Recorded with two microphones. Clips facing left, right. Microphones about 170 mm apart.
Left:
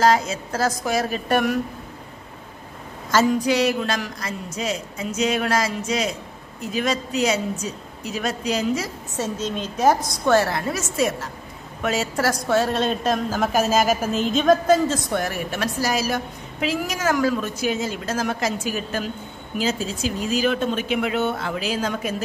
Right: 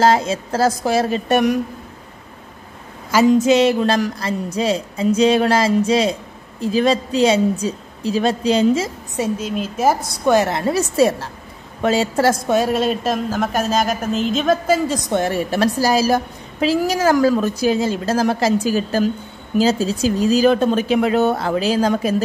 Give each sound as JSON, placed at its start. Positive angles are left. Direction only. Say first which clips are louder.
{"t": 0.0, "sound": "a woman's voice", "louder": "right 3 dB", "side_deg": -30}
{"t": 3.3, "sound": "a woman's voice", "louder": "right 7 dB", "side_deg": -20}
{"t": 9.1, "sound": "a woman's voice", "louder": "right 4 dB", "side_deg": -10}